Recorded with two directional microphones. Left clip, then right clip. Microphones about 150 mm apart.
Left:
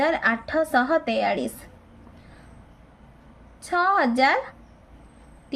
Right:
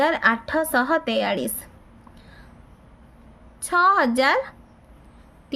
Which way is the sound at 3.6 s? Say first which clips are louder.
Right 3 dB; 45° right (ahead or behind).